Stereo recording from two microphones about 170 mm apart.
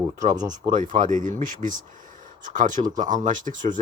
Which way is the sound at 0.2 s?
45° right (ahead or behind).